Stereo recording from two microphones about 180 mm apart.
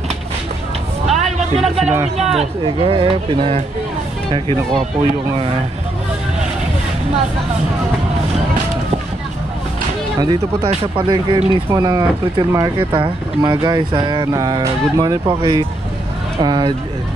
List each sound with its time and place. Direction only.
1.0 s a sound: centre (ahead or behind)
2.3 s speech: 30° right (ahead or behind)
10.1 s speech: 25° right (ahead or behind)